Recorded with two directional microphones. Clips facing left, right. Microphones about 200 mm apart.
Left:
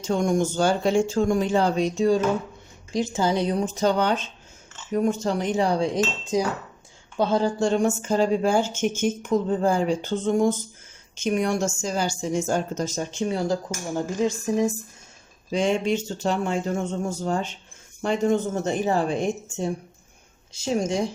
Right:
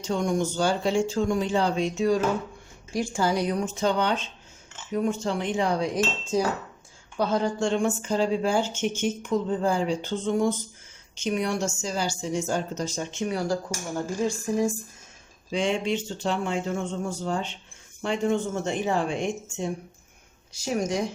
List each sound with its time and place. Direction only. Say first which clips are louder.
0.1 s a woman's voice: left 3 dB; 50° left (ahead or behind); by 6.0 s 35° left (ahead or behind)
6.3 s cutlery: left 1 dB; 15° left (ahead or behind)
7.2 s a woman's voice: left 3 dB; 30° left (ahead or behind)
15.5 s a woman's voice: left 3 dB; 45° left (ahead or behind)
20.5 s speech: left 2 dB; 25° left (ahead or behind)